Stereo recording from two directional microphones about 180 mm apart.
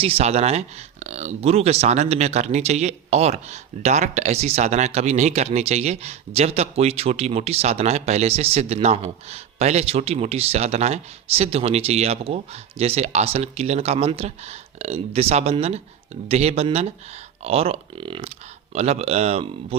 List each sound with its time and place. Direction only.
0.0 s speech: 35° right (ahead or behind)